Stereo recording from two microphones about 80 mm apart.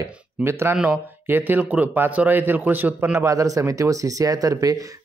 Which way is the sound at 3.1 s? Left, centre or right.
Right.